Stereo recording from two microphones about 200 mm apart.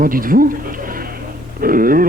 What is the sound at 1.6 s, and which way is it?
Speech, 45° right (ahead or behind).